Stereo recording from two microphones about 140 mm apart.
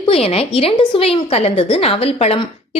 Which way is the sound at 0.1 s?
45° left (ahead or behind).